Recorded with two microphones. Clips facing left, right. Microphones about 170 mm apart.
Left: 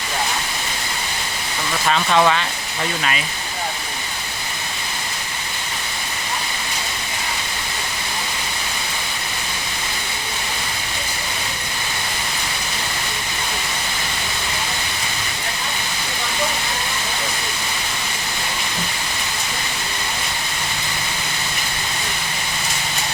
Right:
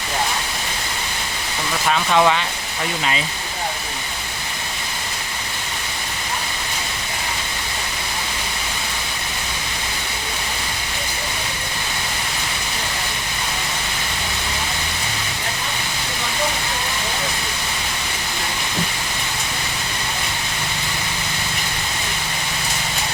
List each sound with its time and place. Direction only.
1.9 s speech: 5° right (ahead or behind)
3.0 s speech: 20° right (ahead or behind)